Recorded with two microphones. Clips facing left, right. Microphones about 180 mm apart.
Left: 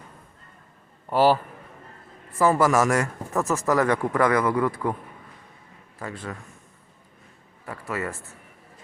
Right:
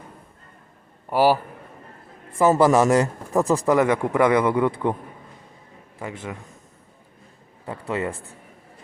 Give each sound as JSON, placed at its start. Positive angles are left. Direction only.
{"t": 1.1, "sound": "a man's voice", "side_deg": -10}
{"t": 2.4, "sound": "a man's voice", "side_deg": -25}
{"t": 6.0, "sound": "a man's voice", "side_deg": -20}
{"t": 7.6, "sound": "a man's voice", "side_deg": -25}